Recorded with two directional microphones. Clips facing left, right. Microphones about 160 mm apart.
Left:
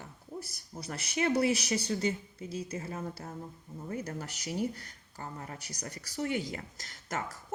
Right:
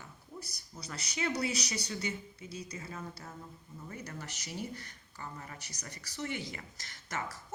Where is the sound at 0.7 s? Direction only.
50° left (ahead or behind).